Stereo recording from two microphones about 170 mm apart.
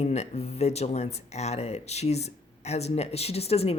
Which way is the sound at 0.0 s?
40° left (ahead or behind).